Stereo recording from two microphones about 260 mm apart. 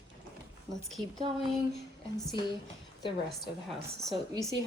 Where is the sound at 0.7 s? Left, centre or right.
Centre.